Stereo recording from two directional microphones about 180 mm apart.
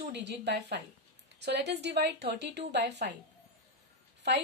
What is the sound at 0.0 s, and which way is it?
A woman's voice, 75° right (ahead or behind).